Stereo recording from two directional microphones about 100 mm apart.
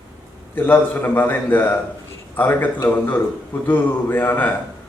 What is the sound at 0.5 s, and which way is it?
A man's voice, 20° left (ahead or behind).